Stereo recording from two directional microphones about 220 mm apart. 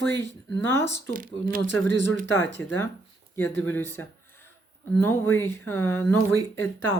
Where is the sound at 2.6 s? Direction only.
10° left (ahead or behind).